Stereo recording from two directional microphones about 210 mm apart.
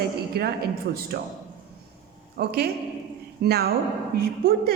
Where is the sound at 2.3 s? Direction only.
50° right (ahead or behind).